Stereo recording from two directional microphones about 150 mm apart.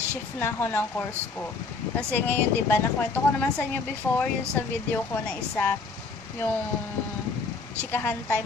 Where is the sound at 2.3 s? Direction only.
15° left (ahead or behind).